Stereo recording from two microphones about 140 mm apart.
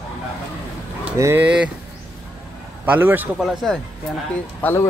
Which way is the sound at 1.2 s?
20° right (ahead or behind).